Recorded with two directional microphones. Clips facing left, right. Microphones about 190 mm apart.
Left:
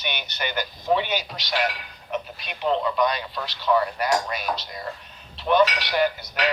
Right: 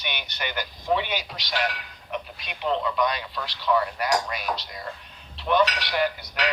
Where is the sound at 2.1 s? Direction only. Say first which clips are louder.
Left 3 dB; 40° left (ahead or behind).